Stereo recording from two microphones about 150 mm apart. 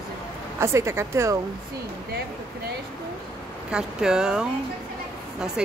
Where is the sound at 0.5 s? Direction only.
15° right (ahead or behind).